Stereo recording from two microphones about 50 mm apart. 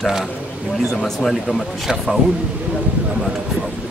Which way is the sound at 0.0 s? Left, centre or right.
Centre.